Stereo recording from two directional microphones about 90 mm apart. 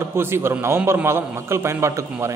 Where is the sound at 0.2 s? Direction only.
25° right (ahead or behind).